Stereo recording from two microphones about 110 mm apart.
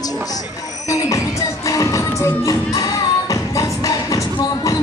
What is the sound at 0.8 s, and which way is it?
Music, 30° left (ahead or behind).